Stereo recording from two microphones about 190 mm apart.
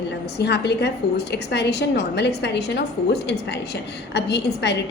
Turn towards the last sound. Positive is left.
turn(degrees=65)  # may be behind; listen again after turning